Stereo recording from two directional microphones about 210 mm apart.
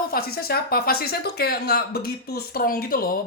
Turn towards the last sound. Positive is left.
turn(degrees=45)  # may be behind; listen again after turning